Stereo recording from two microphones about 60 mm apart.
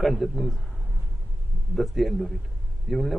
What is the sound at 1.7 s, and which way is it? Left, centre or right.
A man's voice, centre.